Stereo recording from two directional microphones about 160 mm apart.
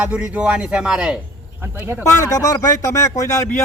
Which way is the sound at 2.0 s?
20° left (ahead or behind).